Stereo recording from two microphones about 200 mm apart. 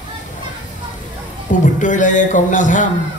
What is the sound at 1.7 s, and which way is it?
A man's voice, 40° left (ahead or behind).